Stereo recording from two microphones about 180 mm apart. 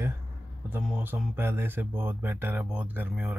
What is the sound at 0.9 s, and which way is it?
Speech, 10° right (ahead or behind).